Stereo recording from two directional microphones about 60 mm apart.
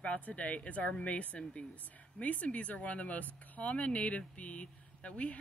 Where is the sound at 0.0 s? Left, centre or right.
Left.